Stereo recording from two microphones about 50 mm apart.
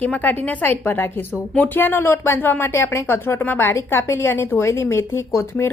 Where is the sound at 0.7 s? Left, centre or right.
Left.